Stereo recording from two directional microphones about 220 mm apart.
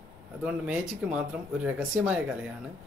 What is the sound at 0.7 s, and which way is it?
Speech, 5° right (ahead or behind).